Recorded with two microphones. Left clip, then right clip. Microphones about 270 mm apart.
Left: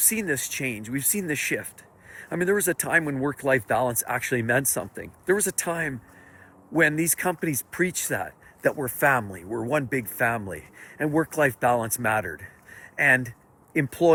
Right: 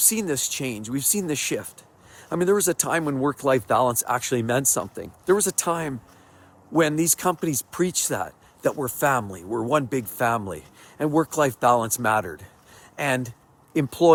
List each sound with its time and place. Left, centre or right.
0.0 s speech: centre